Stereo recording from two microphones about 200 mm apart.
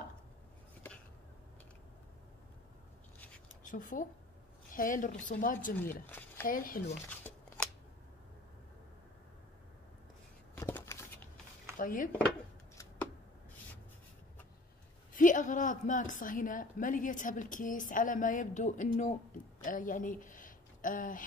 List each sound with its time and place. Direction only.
3.6 s speech: 40° left (ahead or behind)
6.0 s a sound: 10° left (ahead or behind)
6.4 s speech: 45° left (ahead or behind)
7.1 s scissors: 10° left (ahead or behind)
10.5 s a sound: 10° left (ahead or behind)
11.8 s speech: 45° left (ahead or behind)
15.1 s a woman's voice: 40° left (ahead or behind)